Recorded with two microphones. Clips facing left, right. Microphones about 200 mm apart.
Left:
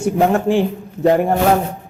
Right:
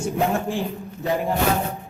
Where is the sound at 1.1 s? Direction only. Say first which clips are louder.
Left 9 dB; 55° left (ahead or behind).